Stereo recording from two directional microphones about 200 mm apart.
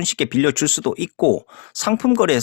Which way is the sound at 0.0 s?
25° left (ahead or behind).